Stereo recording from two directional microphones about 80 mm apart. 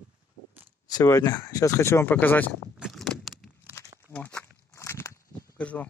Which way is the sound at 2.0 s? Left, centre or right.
Left.